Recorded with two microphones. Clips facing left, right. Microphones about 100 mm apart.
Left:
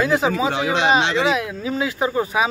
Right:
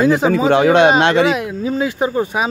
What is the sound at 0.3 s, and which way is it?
Speech, 60° right (ahead or behind).